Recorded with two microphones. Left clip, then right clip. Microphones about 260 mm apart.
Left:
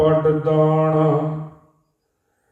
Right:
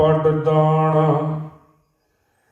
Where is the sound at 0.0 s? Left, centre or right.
Right.